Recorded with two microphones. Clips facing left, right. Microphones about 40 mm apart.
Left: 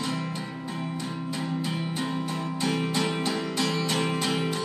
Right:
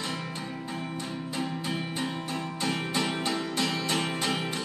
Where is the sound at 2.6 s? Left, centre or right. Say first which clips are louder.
Left 3 dB; right.